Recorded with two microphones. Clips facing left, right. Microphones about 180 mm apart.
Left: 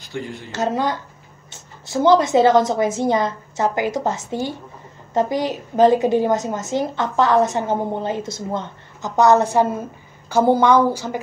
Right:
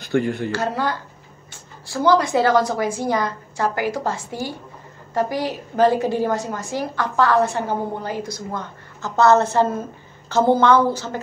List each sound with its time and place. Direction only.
0.0 s speech: 60° right (ahead or behind)
0.5 s a woman's voice: 20° left (ahead or behind)